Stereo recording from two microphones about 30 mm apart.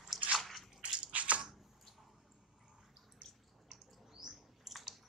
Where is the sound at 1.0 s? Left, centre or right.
Right.